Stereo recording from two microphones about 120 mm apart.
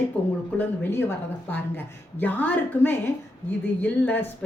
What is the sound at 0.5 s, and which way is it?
A woman's voice, 20° left (ahead or behind).